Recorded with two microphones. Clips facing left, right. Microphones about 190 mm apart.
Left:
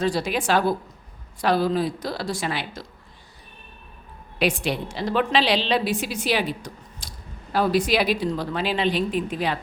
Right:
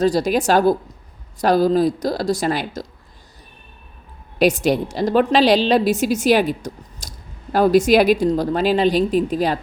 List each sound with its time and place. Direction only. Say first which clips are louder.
0.0 s speech: right 7 dB; 40° right (ahead or behind)
4.4 s a woman's voice: right 7 dB; 40° right (ahead or behind)